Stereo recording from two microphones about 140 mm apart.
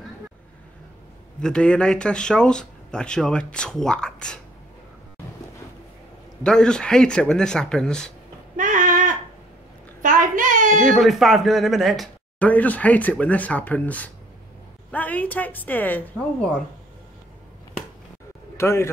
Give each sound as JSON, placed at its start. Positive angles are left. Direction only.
{"t": 1.4, "sound": "speech", "side_deg": 5}
{"t": 6.4, "sound": "speech", "side_deg": 5}
{"t": 8.5, "sound": "sheep", "side_deg": -65}
{"t": 10.0, "sound": "a sound", "side_deg": -70}
{"t": 10.9, "sound": "speech", "side_deg": 0}
{"t": 12.4, "sound": "speech", "side_deg": 10}
{"t": 18.6, "sound": "speech", "side_deg": 20}